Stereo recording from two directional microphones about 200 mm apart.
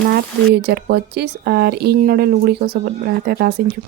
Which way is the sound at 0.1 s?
55° right (ahead or behind).